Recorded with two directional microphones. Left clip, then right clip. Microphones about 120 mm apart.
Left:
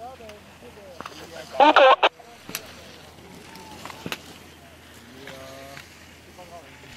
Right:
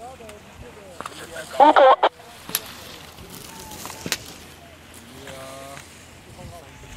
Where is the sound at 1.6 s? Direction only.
Centre (ahead or behind).